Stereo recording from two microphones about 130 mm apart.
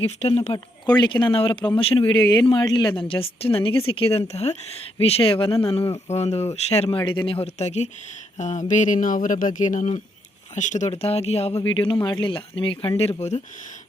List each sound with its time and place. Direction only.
0.0 s speech: 50° left (ahead or behind)
0.9 s a woman's voice: 35° left (ahead or behind)
2.1 s a woman's voice: 35° left (ahead or behind)
13.0 s speech: 55° left (ahead or behind)